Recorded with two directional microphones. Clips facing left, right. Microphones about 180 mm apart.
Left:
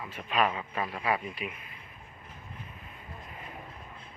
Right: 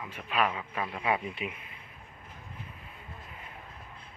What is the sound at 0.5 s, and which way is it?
Speech, centre (ahead or behind).